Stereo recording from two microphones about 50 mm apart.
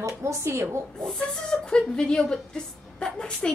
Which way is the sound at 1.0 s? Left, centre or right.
Centre.